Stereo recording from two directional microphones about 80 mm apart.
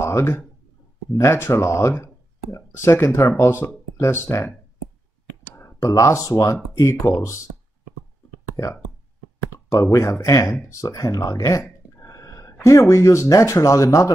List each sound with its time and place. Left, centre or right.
0.0 s a sound: left
1.1 s speech: left
5.6 s speech: left
6.8 s speech: left
8.6 s speech: left
12.0 s a sound: left
12.6 s speech: left